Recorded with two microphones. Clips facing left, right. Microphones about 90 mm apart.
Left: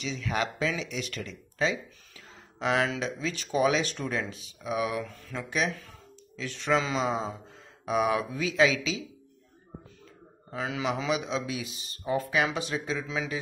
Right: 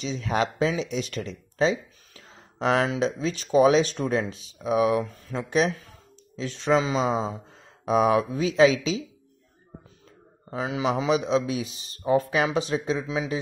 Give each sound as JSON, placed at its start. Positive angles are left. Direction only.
{"t": 0.0, "sound": "speech", "side_deg": -30}
{"t": 10.5, "sound": "speech", "side_deg": -25}